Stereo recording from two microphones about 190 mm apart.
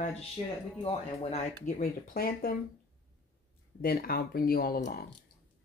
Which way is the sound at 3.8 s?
50° left (ahead or behind).